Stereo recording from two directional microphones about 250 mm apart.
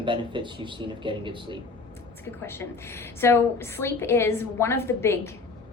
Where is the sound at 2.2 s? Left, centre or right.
Centre.